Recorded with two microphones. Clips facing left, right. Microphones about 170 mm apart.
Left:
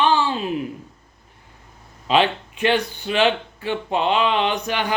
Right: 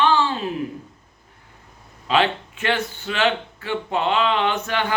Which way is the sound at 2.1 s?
15° left (ahead or behind).